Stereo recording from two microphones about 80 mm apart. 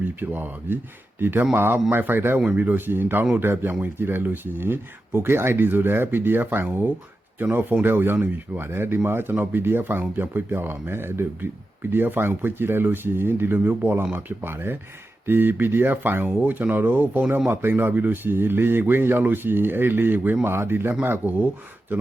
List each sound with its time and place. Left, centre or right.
0.2 s speech: right